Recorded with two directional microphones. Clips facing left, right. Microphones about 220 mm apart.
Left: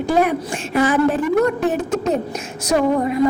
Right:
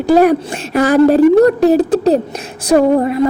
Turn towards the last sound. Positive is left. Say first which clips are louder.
# right 7 dB
turn(degrees=-35)  # may be behind; listen again after turning